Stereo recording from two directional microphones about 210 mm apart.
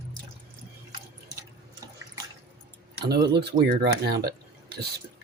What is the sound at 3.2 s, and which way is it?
Speech, 55° right (ahead or behind).